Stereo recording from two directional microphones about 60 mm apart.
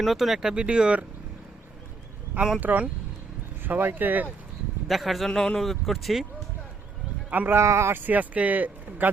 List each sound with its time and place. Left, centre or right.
0.0 s speech: centre
2.6 s speech: right
4.9 s speech: centre
7.3 s speech: right
7.5 s speech: right
8.0 s speech: right